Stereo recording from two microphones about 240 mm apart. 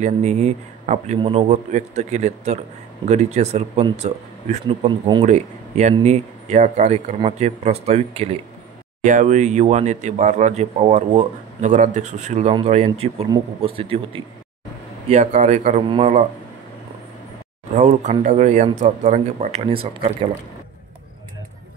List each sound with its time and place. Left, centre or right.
0.0 s speech: right
5.2 s speech: right
17.7 s speech: right